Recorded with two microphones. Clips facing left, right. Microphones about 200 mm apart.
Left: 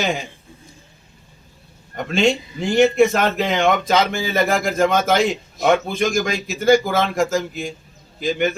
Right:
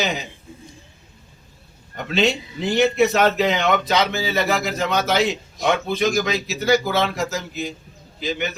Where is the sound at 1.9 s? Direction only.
50° left (ahead or behind).